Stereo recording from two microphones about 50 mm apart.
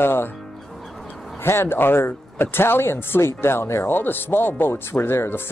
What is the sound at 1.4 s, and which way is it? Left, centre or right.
Speech, left.